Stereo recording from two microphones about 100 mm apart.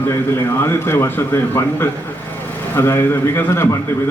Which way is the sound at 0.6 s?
25° left (ahead or behind).